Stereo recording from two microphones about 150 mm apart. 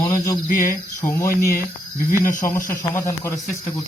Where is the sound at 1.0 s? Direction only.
20° left (ahead or behind).